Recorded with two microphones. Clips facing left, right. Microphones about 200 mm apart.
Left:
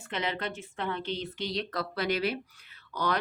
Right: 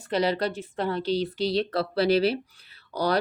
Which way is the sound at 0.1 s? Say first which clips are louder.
Right 9 dB; 35° right (ahead or behind).